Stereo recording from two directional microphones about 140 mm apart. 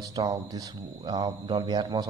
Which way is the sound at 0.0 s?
30° right (ahead or behind).